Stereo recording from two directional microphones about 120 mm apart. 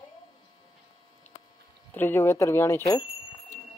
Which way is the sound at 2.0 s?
20° left (ahead or behind).